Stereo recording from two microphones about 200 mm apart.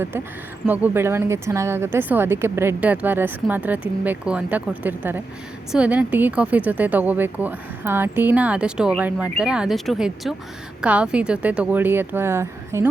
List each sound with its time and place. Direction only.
0.7 s speech: 10° right (ahead or behind)